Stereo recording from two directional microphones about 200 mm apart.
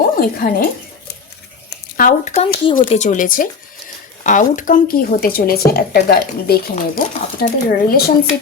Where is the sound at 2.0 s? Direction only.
40° left (ahead or behind).